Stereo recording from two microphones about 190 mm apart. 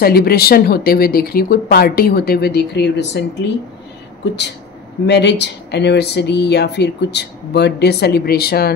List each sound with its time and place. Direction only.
0.0 s speech: 55° left (ahead or behind)
5.0 s speech: 65° left (ahead or behind)